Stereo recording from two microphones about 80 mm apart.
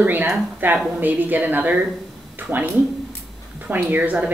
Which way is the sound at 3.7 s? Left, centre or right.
Right.